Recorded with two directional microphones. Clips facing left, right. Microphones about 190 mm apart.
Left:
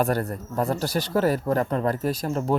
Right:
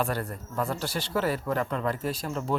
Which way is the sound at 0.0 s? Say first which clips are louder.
Left 6 dB; 40° left (ahead or behind).